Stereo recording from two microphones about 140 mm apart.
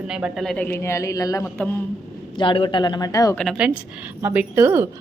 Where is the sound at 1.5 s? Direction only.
10° left (ahead or behind).